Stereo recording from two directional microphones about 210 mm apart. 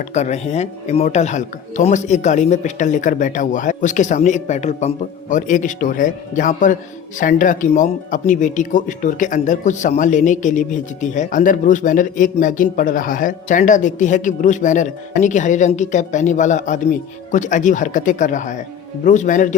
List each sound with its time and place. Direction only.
0.0 s speech: 35° left (ahead or behind)